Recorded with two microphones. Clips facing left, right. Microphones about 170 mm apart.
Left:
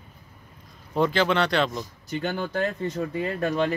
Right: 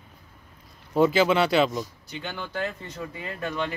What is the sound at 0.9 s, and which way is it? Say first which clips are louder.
Speech: right 2 dB; 5° right (ahead or behind).